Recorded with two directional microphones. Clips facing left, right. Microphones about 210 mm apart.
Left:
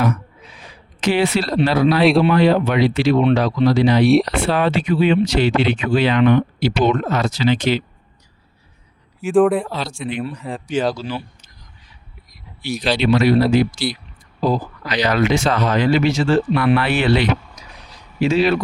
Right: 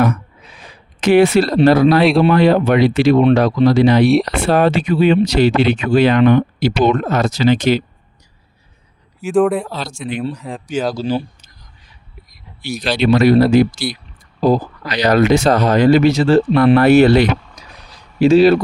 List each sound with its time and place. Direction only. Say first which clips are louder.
1.0 s speech: right 7 dB; 50° right (ahead or behind)
4.0 s speech: right 1 dB; centre (ahead or behind)
4.3 s speech: right 4 dB; 45° right (ahead or behind)
9.2 s speech: even; centre (ahead or behind)
10.9 s speech: right 8 dB; 35° right (ahead or behind)
12.6 s speech: right 2 dB; 45° right (ahead or behind)
17.6 s vehicle: right 1 dB; 30° right (ahead or behind)
18.2 s speech: right 7 dB; 35° right (ahead or behind)